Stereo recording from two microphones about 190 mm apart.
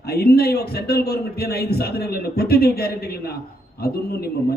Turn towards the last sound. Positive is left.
turn(degrees=55)  # may be behind; listen again after turning